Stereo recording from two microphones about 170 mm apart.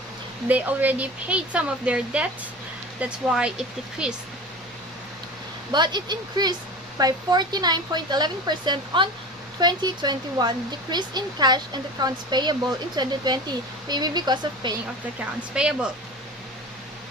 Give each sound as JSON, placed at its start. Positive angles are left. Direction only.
{"t": 0.4, "sound": "speech", "side_deg": -10}
{"t": 5.7, "sound": "speech", "side_deg": -25}
{"t": 15.4, "sound": "speech", "side_deg": -5}